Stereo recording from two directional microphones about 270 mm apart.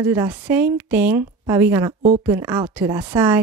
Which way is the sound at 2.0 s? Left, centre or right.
Right.